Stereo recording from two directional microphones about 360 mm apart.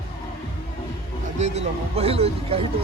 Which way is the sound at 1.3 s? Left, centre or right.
Centre.